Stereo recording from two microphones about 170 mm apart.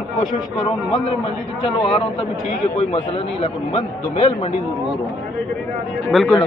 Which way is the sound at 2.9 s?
35° left (ahead or behind).